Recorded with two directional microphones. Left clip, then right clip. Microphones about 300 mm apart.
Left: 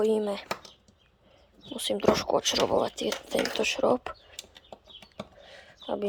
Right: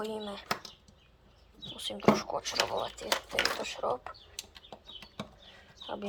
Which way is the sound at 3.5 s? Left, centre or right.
Left.